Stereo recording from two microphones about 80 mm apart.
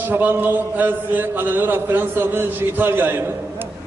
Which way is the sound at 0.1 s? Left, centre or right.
Right.